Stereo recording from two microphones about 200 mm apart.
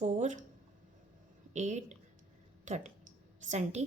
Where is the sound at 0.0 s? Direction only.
35° right (ahead or behind).